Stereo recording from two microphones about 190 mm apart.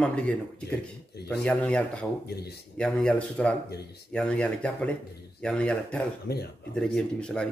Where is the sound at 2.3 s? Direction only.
60° left (ahead or behind).